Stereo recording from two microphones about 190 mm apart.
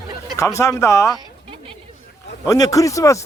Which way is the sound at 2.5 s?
15° left (ahead or behind).